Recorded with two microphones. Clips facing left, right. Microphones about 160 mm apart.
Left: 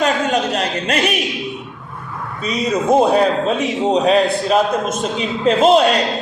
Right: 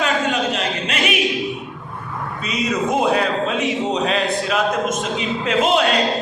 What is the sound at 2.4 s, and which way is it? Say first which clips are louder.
A man's voice: left 3 dB; 40° left (ahead or behind).